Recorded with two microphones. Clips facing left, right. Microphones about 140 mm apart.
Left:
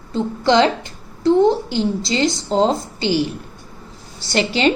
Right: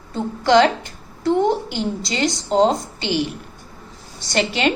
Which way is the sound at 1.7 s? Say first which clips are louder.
Left 4 dB; 30° left (ahead or behind).